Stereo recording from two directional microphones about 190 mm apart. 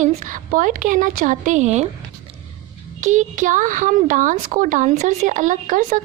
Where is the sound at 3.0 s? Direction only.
40° right (ahead or behind).